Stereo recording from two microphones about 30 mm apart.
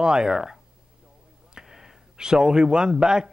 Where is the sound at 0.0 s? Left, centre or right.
Right.